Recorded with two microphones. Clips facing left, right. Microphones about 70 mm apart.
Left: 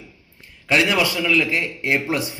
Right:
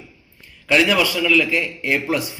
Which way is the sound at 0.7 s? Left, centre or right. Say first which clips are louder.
Right 2 dB; left.